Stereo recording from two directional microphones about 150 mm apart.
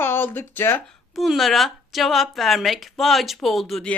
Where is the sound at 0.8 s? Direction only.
Centre (ahead or behind).